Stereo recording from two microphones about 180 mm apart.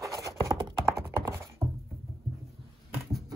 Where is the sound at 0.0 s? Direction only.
20° right (ahead or behind).